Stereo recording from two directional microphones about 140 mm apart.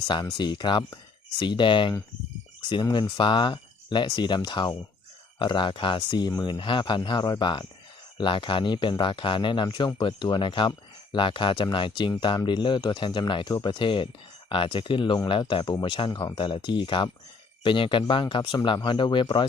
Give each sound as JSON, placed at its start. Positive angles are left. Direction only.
{"t": 0.3, "sound": "speech", "side_deg": 35}